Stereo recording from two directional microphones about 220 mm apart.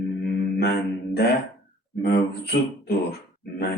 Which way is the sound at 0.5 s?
45° left (ahead or behind).